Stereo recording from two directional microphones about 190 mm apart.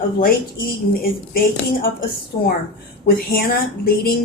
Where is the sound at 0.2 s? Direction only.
50° left (ahead or behind).